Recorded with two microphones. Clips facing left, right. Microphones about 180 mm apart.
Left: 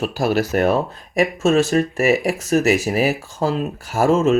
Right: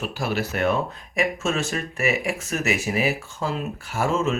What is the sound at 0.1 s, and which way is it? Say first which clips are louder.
Speech: left 8 dB; 40° left (ahead or behind).